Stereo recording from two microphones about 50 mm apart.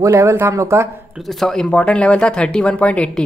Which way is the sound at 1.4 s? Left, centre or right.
Centre.